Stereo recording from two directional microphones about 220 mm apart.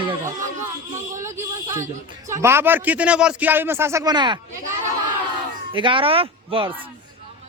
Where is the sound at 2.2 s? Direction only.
10° right (ahead or behind).